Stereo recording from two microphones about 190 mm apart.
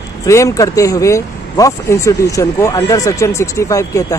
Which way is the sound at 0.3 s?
15° left (ahead or behind).